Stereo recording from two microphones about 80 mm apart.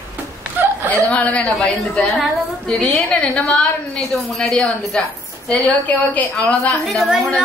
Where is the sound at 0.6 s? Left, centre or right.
Right.